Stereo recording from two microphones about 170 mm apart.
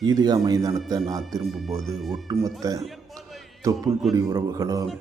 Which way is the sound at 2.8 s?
Centre (ahead or behind).